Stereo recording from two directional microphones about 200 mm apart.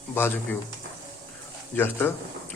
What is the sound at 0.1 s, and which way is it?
Speech, 10° left (ahead or behind).